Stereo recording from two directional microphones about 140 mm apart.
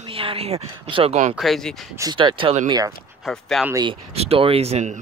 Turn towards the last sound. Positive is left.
turn(degrees=-55)  # may be behind; listen again after turning